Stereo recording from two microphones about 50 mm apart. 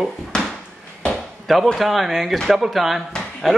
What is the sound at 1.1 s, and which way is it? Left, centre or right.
Chop, centre.